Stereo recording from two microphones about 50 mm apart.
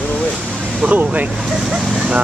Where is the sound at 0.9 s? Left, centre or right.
Right.